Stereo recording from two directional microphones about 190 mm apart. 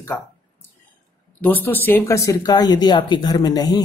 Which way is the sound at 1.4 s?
10° left (ahead or behind).